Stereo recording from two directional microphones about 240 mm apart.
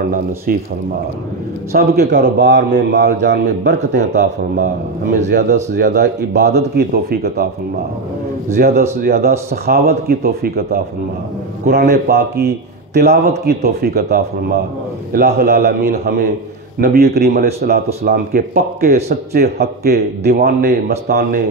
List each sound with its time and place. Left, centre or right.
0.5 s speech: right
1.7 s a man's voice: right
5.3 s speech: right
8.5 s a man's voice: right